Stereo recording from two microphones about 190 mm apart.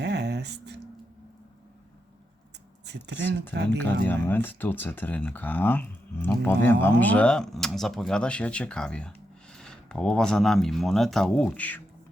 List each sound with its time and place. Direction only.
0.0 s music: 65° right (ahead or behind)
2.8 s speech: 65° right (ahead or behind)
4.0 s speech: 10° left (ahead or behind)